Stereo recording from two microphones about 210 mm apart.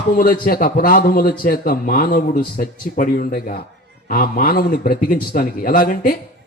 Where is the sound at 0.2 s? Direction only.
45° left (ahead or behind).